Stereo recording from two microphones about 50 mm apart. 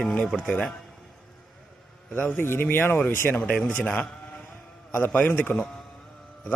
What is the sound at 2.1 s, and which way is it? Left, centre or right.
Speech, left.